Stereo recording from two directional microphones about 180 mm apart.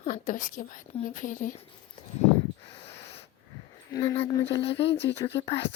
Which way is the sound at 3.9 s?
20° left (ahead or behind).